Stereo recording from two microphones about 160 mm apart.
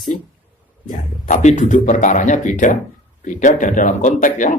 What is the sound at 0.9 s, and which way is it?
A man's voice, 50° left (ahead or behind).